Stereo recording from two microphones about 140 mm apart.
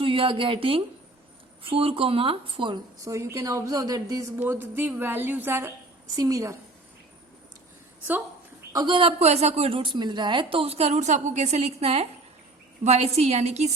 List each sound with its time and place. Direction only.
0.0 s a woman's voice: 40° right (ahead or behind); by 6.6 s 20° right (ahead or behind)
8.7 s a woman's voice: 30° right (ahead or behind); by 13.7 s 50° right (ahead or behind)